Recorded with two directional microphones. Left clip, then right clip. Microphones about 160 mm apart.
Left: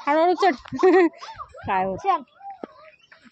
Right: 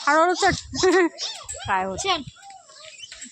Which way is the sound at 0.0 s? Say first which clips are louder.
Right 1 dB; 20° left (ahead or behind).